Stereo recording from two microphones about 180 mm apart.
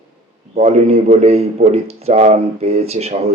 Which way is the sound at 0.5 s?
35° right (ahead or behind).